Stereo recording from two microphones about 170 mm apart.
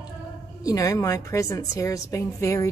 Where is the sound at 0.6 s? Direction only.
20° left (ahead or behind).